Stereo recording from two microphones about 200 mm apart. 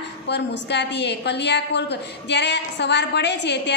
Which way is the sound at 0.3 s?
60° left (ahead or behind).